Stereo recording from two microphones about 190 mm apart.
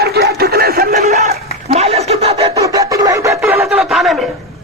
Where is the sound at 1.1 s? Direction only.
35° right (ahead or behind).